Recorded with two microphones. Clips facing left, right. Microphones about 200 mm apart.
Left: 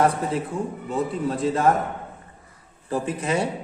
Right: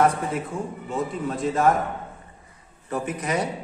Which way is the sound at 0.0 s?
30° left (ahead or behind).